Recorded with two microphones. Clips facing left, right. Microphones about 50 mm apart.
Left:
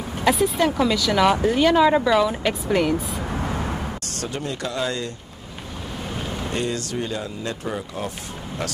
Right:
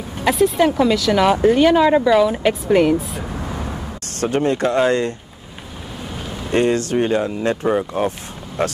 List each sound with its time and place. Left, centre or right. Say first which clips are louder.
0.2 s speech: right 4 dB; centre
3.3 s vehicle: left 1 dB; left
4.2 s speech: right 12 dB; right
6.1 s vehicle: left 1 dB; centre
6.5 s speech: right 11 dB; right